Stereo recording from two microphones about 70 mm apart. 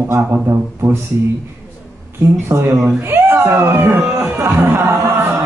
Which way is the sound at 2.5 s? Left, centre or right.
Right.